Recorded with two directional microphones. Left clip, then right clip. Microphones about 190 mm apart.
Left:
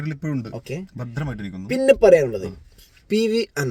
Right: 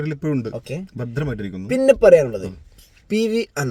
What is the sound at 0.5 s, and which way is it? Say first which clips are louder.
Speech: right 2 dB; 10° left (ahead or behind).